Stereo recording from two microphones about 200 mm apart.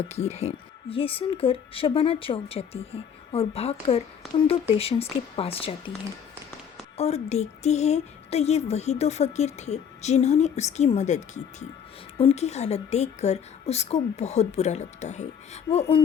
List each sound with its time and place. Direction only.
0.0 s speech: 35° left (ahead or behind)
6.9 s a woman's voice: 30° left (ahead or behind)